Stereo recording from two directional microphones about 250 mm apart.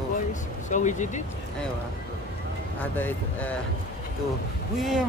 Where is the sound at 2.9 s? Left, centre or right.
Centre.